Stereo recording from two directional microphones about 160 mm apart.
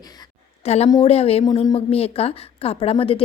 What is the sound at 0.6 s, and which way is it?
A woman's voice, 40° left (ahead or behind).